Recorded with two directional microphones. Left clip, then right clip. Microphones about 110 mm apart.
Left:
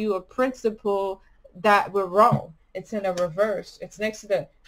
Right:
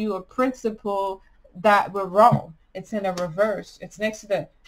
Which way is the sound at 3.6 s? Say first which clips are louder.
Right 1 dB; 20° left (ahead or behind).